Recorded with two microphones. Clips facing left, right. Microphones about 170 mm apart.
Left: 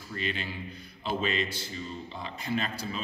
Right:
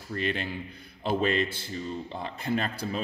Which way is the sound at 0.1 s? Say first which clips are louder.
Right 4 dB; 55° right (ahead or behind).